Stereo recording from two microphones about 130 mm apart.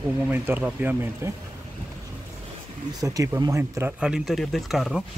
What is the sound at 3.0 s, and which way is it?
Speech, 25° right (ahead or behind).